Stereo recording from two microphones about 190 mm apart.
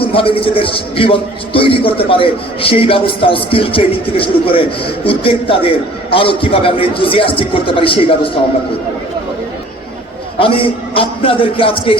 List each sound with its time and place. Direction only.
0.0 s a man's voice: 30° left (ahead or behind)
10.4 s a man's voice: 30° left (ahead or behind)